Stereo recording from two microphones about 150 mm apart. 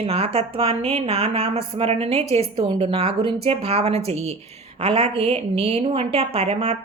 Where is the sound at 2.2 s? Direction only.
20° left (ahead or behind).